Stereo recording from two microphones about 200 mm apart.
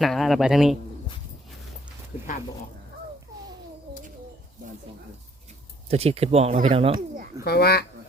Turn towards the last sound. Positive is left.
turn(degrees=50)  # may be behind; listen again after turning